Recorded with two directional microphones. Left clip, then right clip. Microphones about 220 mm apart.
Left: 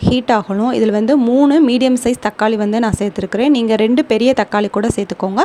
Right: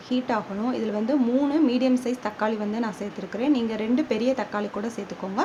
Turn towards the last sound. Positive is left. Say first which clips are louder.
# left 13 dB
turn(degrees=40)  # may be behind; listen again after turning